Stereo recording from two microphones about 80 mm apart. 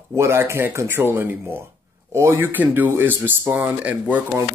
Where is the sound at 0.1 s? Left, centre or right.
Right.